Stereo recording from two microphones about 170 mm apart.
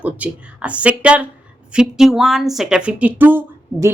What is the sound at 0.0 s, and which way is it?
A woman's voice, 10° right (ahead or behind).